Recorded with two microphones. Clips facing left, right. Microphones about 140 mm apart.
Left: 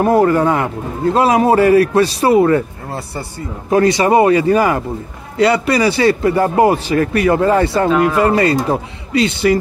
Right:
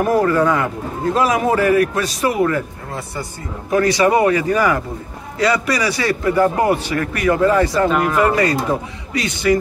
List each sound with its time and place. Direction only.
0.0 s a man's voice: 25° left (ahead or behind)